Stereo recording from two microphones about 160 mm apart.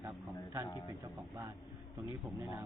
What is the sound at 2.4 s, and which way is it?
Speech, 15° right (ahead or behind).